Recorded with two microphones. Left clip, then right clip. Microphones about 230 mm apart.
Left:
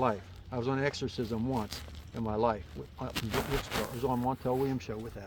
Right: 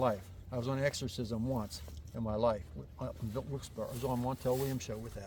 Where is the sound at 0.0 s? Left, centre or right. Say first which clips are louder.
Left 2 dB; right.